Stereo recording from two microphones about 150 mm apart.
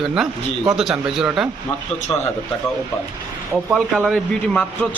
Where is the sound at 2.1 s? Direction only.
35° left (ahead or behind).